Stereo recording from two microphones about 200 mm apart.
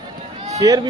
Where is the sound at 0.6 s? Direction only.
20° right (ahead or behind).